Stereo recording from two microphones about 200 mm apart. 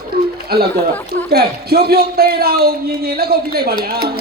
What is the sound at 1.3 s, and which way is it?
A man's voice, 50° right (ahead or behind).